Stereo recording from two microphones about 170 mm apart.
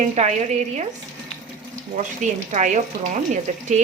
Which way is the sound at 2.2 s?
45° right (ahead or behind).